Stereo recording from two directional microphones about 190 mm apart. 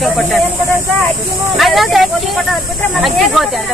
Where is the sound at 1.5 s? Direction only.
Centre (ahead or behind).